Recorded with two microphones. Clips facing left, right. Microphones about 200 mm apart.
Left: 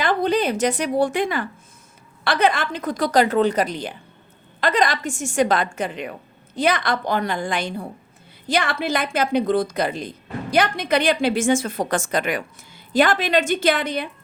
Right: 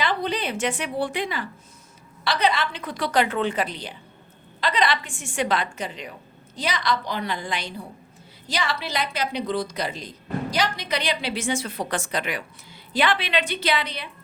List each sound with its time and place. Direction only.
0.0 s a woman's voice: 45° left (ahead or behind)